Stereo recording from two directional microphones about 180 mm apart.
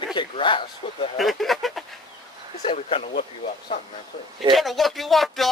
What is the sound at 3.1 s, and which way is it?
Speech, 60° left (ahead or behind).